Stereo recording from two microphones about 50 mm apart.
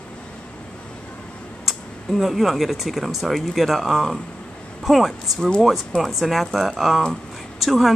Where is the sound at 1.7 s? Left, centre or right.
Centre.